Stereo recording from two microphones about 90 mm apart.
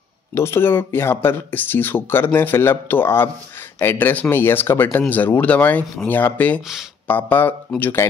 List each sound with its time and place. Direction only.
0.3 s speech: 30° left (ahead or behind)